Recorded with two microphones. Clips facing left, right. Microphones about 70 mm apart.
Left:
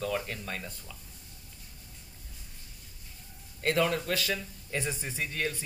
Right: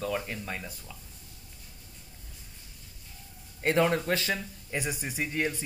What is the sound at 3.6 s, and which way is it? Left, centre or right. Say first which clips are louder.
Speech: right 3 dB; right.